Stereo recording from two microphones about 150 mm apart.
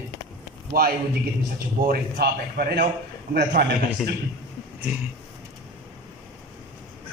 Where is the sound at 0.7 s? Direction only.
90° right.